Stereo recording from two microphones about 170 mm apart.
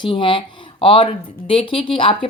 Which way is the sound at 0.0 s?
30° left (ahead or behind).